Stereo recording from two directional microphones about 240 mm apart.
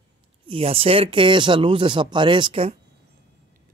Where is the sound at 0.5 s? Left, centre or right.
Right.